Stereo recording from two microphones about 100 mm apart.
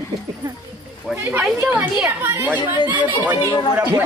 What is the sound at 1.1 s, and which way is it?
A woman's voice, 20° right (ahead or behind).